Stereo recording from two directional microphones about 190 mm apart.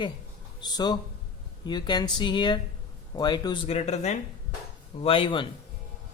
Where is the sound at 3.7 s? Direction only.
35° left (ahead or behind).